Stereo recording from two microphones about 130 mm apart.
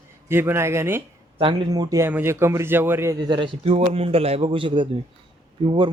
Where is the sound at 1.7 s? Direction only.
25° right (ahead or behind).